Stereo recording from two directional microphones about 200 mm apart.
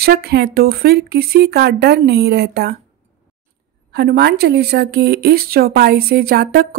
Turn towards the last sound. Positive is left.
turn(degrees=-50)  # may be behind; listen again after turning